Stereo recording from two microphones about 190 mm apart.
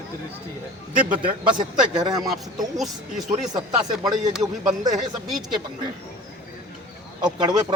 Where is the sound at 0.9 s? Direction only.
45° right (ahead or behind).